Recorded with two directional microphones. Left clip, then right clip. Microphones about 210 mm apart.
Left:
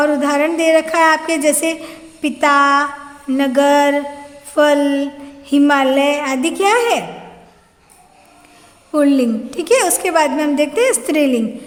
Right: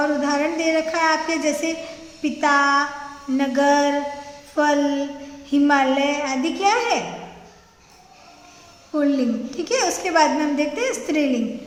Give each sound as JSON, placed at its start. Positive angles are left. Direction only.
{"t": 0.0, "sound": "a sound", "side_deg": 45}
{"t": 5.5, "sound": "a woman's voice", "side_deg": 40}
{"t": 8.9, "sound": "a woman's voice", "side_deg": 45}